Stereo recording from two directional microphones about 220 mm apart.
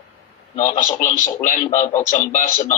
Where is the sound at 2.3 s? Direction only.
35° left (ahead or behind).